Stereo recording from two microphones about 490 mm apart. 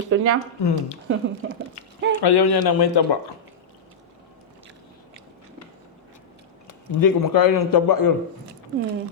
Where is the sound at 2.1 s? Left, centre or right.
Left.